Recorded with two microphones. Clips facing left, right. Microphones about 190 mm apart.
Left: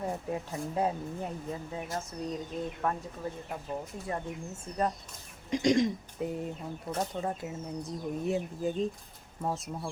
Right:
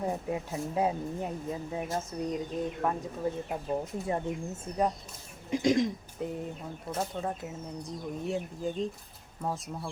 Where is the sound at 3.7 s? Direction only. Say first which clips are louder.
Right 5 dB; 25° right (ahead or behind).